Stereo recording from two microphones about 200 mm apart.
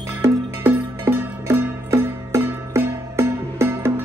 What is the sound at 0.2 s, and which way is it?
Music, 10° right (ahead or behind).